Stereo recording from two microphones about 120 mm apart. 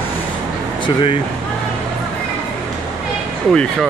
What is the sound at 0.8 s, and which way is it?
Speech, 45° left (ahead or behind).